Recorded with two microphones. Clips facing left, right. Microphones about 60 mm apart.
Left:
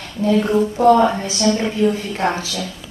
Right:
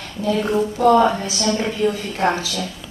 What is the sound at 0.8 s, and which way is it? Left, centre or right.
Speech, left.